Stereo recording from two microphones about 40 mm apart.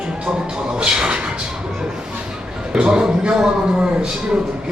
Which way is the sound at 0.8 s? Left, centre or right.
Right.